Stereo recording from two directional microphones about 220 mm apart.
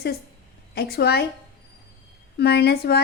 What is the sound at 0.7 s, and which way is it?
Speech, 45° left (ahead or behind).